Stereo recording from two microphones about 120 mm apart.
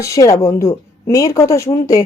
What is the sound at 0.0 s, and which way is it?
A woman's voice, 25° left (ahead or behind).